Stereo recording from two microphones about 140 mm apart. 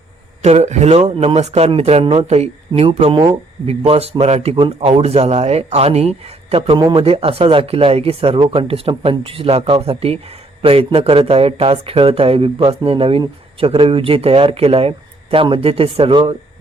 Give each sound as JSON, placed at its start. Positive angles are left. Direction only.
{"t": 0.4, "sound": "speech", "side_deg": -55}
{"t": 6.7, "sound": "speech", "side_deg": -30}
{"t": 7.0, "sound": "speech", "side_deg": -45}